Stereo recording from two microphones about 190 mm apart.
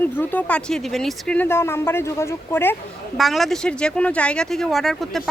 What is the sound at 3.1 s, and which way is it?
Speech, centre (ahead or behind).